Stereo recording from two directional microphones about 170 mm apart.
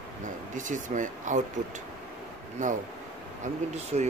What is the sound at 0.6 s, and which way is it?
Speech, 50° right (ahead or behind).